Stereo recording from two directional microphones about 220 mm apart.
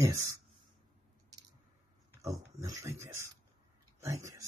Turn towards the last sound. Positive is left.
turn(degrees=-15)  # may be behind; listen again after turning